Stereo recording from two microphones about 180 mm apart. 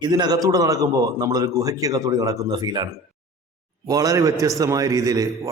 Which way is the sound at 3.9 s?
20° right (ahead or behind).